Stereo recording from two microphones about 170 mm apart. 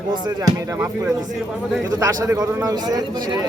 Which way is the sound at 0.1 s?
20° right (ahead or behind).